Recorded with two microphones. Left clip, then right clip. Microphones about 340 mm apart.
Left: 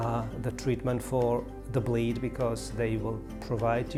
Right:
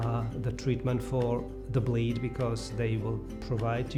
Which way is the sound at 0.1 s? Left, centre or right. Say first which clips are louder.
Left 3 dB; left.